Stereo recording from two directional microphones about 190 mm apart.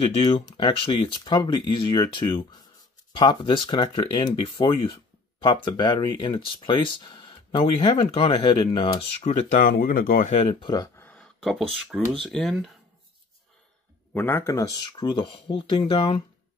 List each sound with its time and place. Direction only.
0.5 s speech: 25° left (ahead or behind)
9.2 s speech: 40° left (ahead or behind); by 11.1 s 20° left (ahead or behind)
11.1 s speech: centre (ahead or behind)
14.1 s speech: 10° left (ahead or behind); by 16.2 s 30° left (ahead or behind)